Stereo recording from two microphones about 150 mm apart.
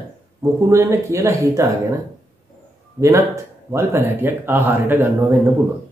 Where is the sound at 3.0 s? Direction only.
20° right (ahead or behind).